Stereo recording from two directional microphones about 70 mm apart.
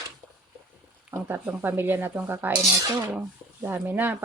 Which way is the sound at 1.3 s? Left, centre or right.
Right.